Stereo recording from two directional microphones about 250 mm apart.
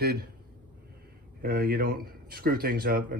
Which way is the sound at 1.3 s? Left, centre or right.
Right.